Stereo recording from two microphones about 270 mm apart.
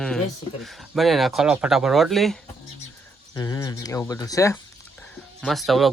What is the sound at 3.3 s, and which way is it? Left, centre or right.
Speech, centre.